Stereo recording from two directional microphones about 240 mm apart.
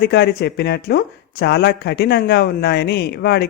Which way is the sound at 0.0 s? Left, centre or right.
Left.